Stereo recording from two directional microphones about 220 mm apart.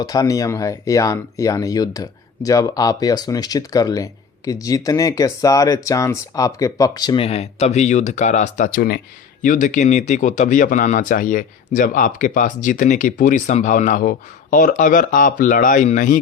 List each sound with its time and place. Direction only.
0.0 s speech: 15° left (ahead or behind); by 16.2 s 35° left (ahead or behind)